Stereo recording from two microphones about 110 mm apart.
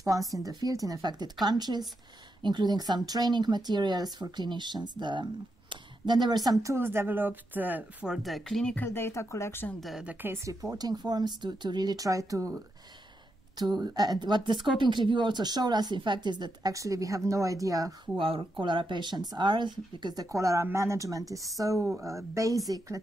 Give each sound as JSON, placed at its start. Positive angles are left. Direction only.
{"t": 0.0, "sound": "speech", "side_deg": -30}
{"t": 8.1, "sound": "speech", "side_deg": 0}
{"t": 8.7, "sound": "speech", "side_deg": 20}
{"t": 9.8, "sound": "speech", "side_deg": 0}
{"t": 10.0, "sound": "speech", "side_deg": -20}
{"t": 13.6, "sound": "speech", "side_deg": -40}
{"t": 18.1, "sound": "speech", "side_deg": -55}
{"t": 20.2, "sound": "speech", "side_deg": -30}